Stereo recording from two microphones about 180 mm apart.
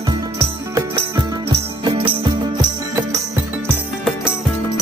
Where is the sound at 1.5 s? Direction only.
30° right (ahead or behind).